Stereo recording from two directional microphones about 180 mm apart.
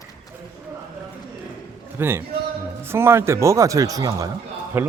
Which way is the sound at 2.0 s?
10° right (ahead or behind).